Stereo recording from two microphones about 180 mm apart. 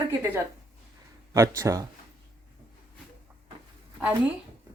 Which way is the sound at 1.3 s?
15° right (ahead or behind).